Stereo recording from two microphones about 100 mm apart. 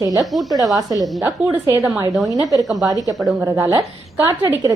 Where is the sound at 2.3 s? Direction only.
35° right (ahead or behind).